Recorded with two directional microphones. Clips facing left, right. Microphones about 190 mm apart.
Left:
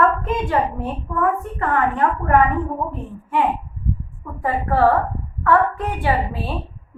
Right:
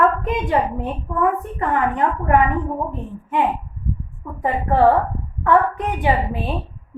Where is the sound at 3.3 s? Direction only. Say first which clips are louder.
Even; 20° right (ahead or behind).